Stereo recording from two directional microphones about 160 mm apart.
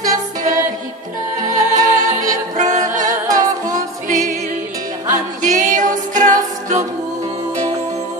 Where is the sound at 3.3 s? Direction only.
25° right (ahead or behind).